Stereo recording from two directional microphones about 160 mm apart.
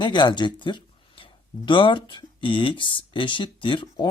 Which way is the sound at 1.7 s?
30° left (ahead or behind).